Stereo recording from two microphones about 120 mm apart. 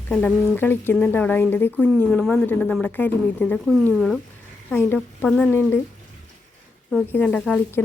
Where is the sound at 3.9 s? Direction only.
Centre (ahead or behind).